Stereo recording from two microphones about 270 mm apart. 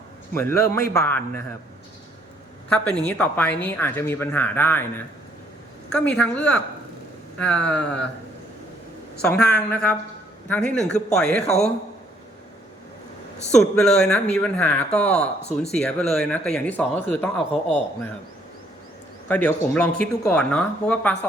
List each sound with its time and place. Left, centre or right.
0.3 s speech: centre
2.6 s speech: centre
9.2 s speech: centre
11.4 s speech: left
13.5 s speech: centre
19.3 s speech: centre